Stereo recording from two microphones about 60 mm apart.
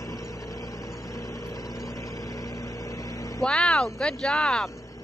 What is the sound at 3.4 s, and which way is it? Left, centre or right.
Speech, centre.